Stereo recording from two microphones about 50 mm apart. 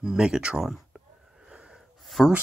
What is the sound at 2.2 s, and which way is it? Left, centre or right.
Speech, centre.